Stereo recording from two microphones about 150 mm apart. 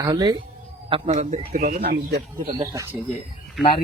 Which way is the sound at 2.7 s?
20° right (ahead or behind).